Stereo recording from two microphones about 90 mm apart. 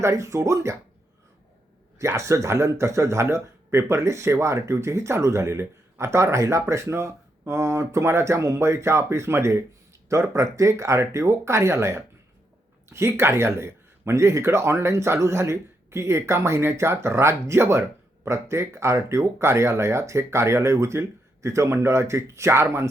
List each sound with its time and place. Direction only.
0.0 s speech: 35° right (ahead or behind)
2.0 s speech: 35° right (ahead or behind)